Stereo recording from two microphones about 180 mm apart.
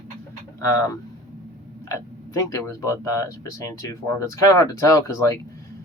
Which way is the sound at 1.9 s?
20° left (ahead or behind).